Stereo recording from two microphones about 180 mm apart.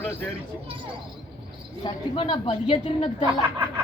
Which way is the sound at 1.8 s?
25° left (ahead or behind).